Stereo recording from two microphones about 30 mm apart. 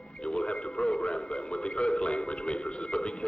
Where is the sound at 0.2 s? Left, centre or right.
Left.